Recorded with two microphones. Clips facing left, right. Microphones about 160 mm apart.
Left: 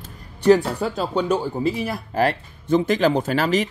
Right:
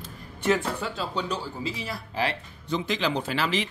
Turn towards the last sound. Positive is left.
turn(degrees=45)  # may be behind; listen again after turning